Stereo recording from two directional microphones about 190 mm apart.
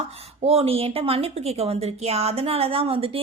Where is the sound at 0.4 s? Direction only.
30° right (ahead or behind).